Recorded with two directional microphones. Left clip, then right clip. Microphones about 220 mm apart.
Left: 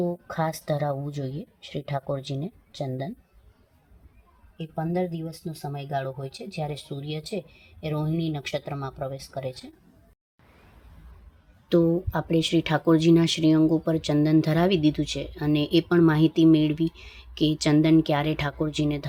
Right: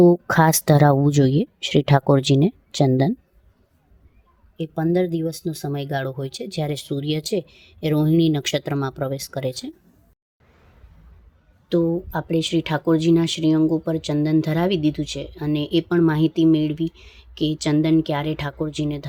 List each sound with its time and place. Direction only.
0.0 s speech: 55° right (ahead or behind)
4.5 s speech: 50° right (ahead or behind)
11.7 s speech: 5° right (ahead or behind)